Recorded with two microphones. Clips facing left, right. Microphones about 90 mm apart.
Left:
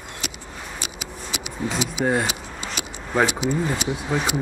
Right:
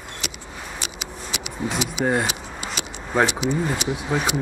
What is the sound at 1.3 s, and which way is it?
Vehicle, 60° right (ahead or behind).